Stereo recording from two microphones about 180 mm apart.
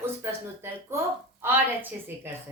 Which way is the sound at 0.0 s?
15° right (ahead or behind).